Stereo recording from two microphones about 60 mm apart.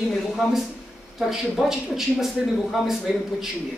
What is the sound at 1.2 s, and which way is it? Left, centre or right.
Speech, centre.